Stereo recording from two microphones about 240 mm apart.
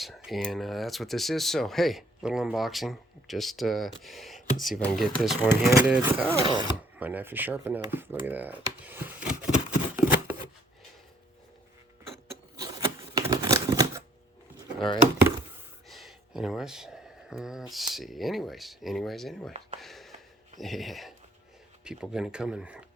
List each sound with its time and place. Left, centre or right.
0.0 s speech: centre
6.4 s speech: centre
7.0 s speech: centre
12.6 s a sound: centre
15.9 s speech: centre
19.8 s a sound: centre
20.6 s speech: centre